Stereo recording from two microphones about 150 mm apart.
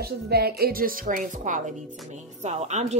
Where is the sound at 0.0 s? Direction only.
90° right.